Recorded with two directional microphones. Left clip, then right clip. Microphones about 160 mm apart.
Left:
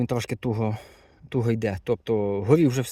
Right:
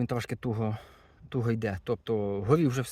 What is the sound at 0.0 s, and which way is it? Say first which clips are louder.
Speech: left 5 dB; 30° left (ahead or behind).